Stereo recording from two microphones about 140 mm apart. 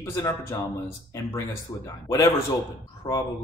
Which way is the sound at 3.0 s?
45° left (ahead or behind).